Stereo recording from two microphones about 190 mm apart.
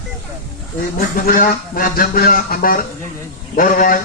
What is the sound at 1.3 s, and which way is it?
A man's voice, 45° left (ahead or behind).